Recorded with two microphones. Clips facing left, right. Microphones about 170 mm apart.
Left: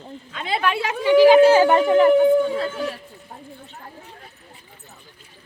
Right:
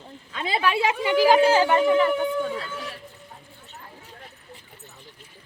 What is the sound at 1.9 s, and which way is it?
Speech, 45° left (ahead or behind).